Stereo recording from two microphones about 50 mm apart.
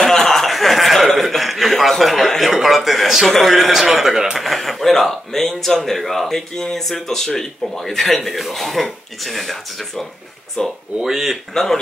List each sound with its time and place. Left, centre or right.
0.0 s chuckle: centre
2.5 s a sound: centre
3.3 s speech: centre
10.6 s speech: centre
11.0 s speech: centre
11.5 s speech: centre